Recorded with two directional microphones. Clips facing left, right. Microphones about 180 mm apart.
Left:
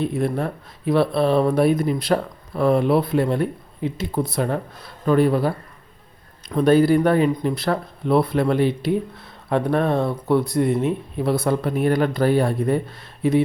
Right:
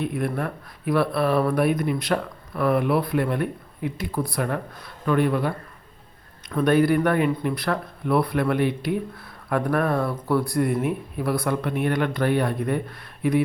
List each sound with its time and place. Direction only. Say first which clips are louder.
0.0 s speech: left 4 dB; 25° left (ahead or behind)
6.6 s speech: left 4 dB; 30° left (ahead or behind)